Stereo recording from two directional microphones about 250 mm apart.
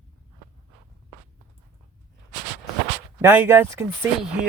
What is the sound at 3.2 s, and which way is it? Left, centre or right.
Speech, centre.